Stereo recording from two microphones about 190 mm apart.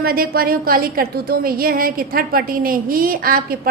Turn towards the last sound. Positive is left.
turn(degrees=-50)  # may be behind; listen again after turning